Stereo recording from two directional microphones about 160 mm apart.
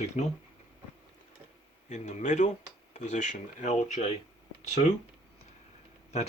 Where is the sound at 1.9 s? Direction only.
45° left (ahead or behind).